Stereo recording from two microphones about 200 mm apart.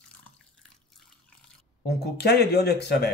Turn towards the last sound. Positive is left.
turn(degrees=55)  # may be behind; listen again after turning